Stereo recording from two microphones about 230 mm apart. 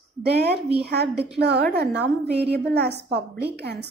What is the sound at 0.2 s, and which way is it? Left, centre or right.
A woman's voice, right.